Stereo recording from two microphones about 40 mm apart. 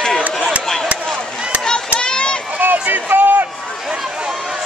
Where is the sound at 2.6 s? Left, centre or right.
Right.